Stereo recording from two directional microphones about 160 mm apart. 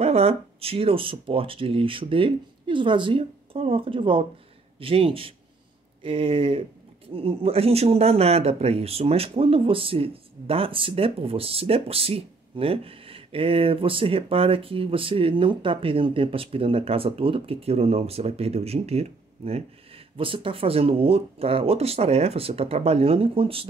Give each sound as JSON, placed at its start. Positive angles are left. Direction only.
{"t": 0.0, "sound": "speech", "side_deg": -40}